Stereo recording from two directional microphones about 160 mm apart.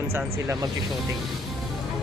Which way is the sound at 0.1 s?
20° right (ahead or behind).